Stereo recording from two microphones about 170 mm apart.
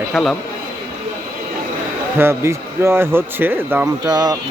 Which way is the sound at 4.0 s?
25° right (ahead or behind).